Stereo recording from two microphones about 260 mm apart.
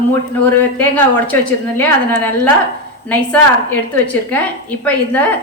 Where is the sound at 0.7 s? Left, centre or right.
Centre.